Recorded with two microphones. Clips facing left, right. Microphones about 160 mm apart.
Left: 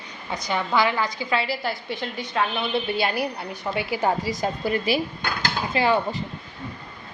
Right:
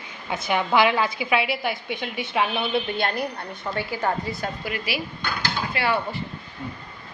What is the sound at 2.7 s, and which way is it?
A woman's voice, 5° left (ahead or behind).